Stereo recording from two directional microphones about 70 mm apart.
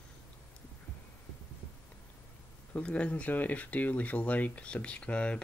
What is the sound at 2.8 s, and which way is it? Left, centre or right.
Speech, centre.